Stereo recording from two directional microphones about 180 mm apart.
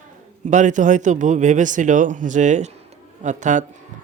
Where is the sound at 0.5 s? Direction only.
45° right (ahead or behind).